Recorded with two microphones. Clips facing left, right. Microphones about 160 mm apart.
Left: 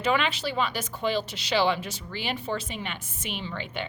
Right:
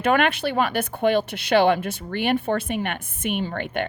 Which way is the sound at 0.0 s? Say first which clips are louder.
Right 6 dB; 55° right (ahead or behind).